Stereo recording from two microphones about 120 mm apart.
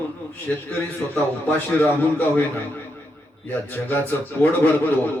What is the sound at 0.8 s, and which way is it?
A man's voice, 10° left (ahead or behind).